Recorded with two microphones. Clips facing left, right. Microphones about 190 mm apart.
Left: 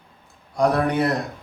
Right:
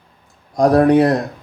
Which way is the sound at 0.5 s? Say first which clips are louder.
Right 8 dB; 35° right (ahead or behind).